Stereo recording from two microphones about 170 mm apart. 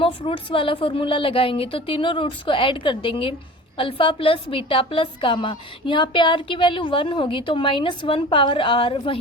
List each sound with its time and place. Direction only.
0.0 s a woman's voice: 30° left (ahead or behind)